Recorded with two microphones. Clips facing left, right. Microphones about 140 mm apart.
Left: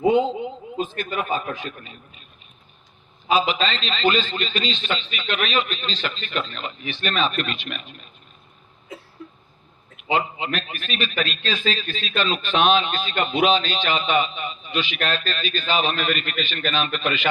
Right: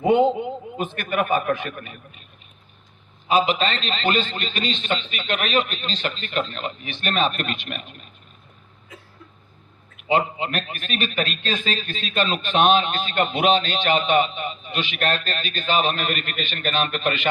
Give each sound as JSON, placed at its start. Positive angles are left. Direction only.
{"t": 0.1, "sound": "a man's voice", "side_deg": -60}
{"t": 3.3, "sound": "a man's voice", "side_deg": -55}
{"t": 10.1, "sound": "a man's voice", "side_deg": -50}